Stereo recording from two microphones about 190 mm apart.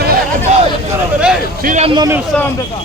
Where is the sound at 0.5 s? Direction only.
35° right (ahead or behind).